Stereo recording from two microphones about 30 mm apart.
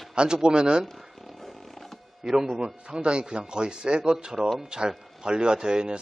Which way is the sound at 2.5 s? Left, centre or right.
Right.